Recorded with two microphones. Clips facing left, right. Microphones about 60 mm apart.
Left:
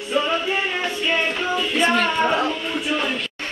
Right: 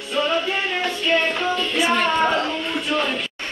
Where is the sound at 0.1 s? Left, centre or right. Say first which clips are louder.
Even; centre.